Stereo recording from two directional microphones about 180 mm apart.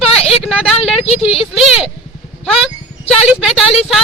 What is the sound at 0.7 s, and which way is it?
Speech, 35° left (ahead or behind).